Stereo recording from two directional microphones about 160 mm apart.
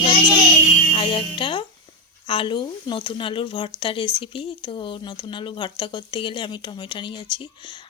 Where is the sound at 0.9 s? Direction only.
35° left (ahead or behind).